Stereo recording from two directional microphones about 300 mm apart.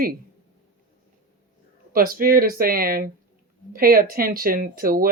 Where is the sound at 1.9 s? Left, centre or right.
Right.